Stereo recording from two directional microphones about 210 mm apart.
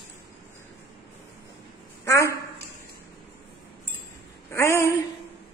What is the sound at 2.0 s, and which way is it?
Speech, 15° left (ahead or behind).